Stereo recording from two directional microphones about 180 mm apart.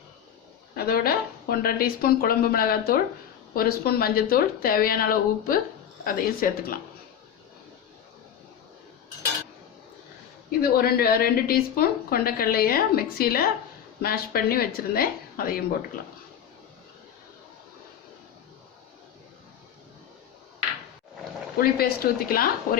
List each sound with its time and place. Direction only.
0.8 s a woman's voice: 55° left (ahead or behind)
10.6 s a woman's voice: 60° left (ahead or behind)
21.6 s a woman's voice: 55° left (ahead or behind)